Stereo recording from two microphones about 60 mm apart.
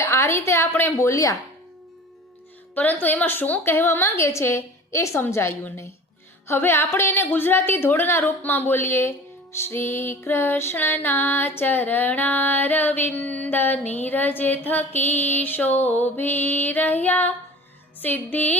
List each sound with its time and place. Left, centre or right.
0.0 s a woman's voice: left
0.7 s a woman's voice: left
0.9 s speech: left
2.7 s a woman's voice: left
3.6 s a woman's voice: left